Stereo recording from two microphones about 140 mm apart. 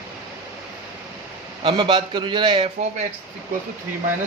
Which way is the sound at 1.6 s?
40° right (ahead or behind).